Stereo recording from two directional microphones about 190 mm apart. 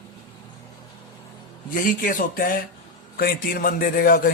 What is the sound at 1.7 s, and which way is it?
A man's voice, 45° left (ahead or behind).